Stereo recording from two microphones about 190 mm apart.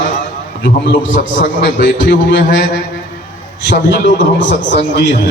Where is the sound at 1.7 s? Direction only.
45° left (ahead or behind).